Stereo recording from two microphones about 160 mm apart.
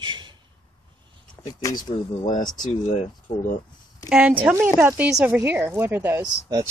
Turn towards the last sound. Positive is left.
turn(degrees=-25)  # may be behind; listen again after turning